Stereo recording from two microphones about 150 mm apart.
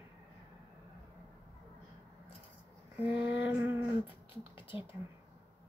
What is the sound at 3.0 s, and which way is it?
Female singing, 10° right (ahead or behind).